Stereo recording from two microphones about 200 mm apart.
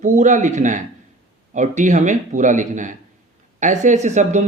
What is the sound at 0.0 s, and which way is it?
Speech, 40° right (ahead or behind).